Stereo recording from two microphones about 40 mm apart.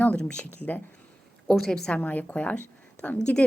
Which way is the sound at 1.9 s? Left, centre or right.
Left.